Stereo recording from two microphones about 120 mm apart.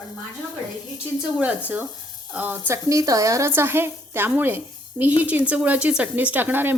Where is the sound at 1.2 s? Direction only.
10° right (ahead or behind).